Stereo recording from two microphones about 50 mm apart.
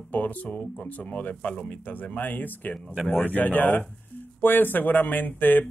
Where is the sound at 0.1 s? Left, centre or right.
Left.